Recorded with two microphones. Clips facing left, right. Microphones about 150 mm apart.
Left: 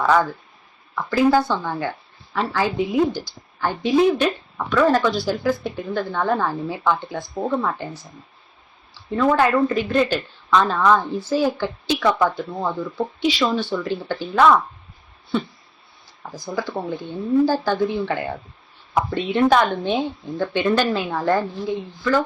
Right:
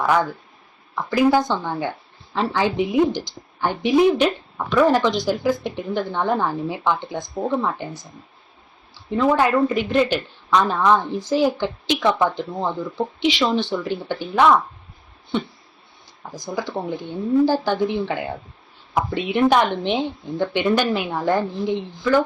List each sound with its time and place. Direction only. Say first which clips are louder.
0.0 s a woman's voice: left 1 dB; 15° right (ahead or behind)
7.3 s speech: even; centre (ahead or behind)
7.6 s speech: even; 15° right (ahead or behind)
16.5 s a woman's voice: even; 15° right (ahead or behind)